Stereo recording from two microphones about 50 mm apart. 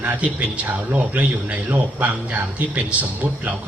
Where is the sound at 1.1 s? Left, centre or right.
Right.